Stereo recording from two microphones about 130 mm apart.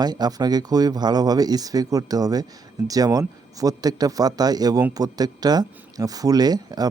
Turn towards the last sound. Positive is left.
turn(degrees=-30)  # may be behind; listen again after turning